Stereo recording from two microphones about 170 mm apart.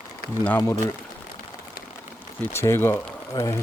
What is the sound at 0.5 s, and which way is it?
Speech, 20° left (ahead or behind).